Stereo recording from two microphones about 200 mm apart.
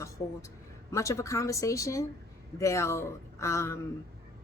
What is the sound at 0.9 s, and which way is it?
Speech, 15° left (ahead or behind).